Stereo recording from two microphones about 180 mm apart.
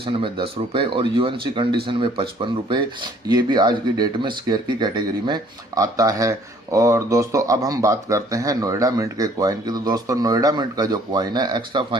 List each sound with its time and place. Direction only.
0.0 s speech: 30° right (ahead or behind)